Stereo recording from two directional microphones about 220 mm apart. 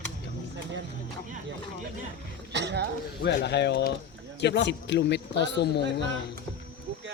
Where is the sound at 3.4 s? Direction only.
50° left (ahead or behind).